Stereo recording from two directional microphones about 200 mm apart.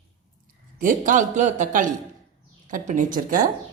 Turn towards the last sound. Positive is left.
turn(degrees=-40)  # may be behind; listen again after turning